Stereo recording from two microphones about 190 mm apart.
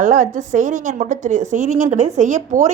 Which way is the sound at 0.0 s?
40° right (ahead or behind).